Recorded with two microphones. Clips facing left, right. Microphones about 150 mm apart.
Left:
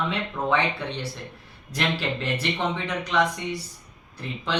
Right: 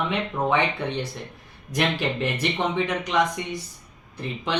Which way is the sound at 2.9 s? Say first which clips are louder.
Right 1 dB; 20° right (ahead or behind).